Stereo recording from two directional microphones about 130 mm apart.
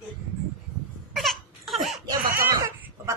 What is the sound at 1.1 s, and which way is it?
Crying, centre (ahead or behind).